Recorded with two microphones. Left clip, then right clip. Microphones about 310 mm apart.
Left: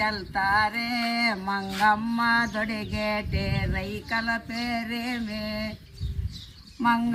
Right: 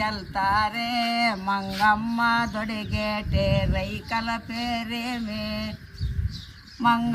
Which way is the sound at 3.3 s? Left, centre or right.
Right.